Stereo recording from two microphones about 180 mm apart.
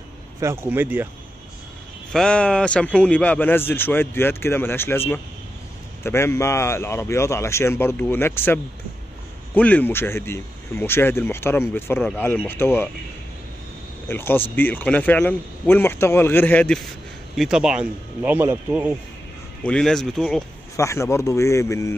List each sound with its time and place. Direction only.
0.4 s speech: 15° right (ahead or behind)
2.1 s speech: 5° left (ahead or behind)
14.0 s speech: 10° left (ahead or behind)
17.4 s speech: 5° right (ahead or behind)
19.6 s speech: 5° left (ahead or behind)
20.7 s speech: 15° left (ahead or behind)